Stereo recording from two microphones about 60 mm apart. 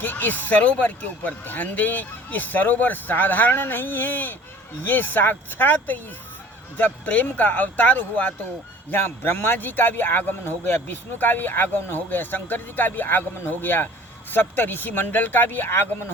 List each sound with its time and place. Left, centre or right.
0.0 s a man's voice: left
8.9 s a man's voice: left